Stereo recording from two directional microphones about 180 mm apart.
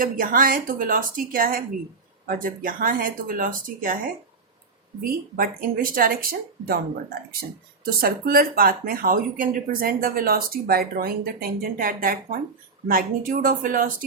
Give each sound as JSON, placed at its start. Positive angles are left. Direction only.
{"t": 0.0, "sound": "speech", "side_deg": -50}